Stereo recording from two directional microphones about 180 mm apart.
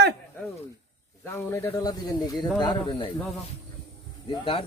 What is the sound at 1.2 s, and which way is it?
Speech, 15° left (ahead or behind).